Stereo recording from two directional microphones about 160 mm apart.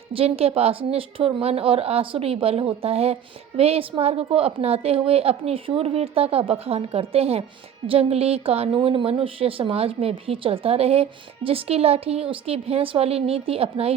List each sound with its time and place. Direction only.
0.1 s a woman's voice: 35° right (ahead or behind)